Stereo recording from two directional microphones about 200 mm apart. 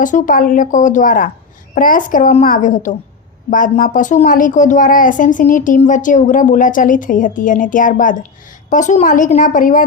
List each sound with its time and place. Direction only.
0.0 s a woman's voice: 40° left (ahead or behind)